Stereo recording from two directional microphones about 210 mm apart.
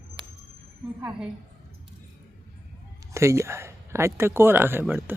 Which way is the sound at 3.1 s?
15° right (ahead or behind).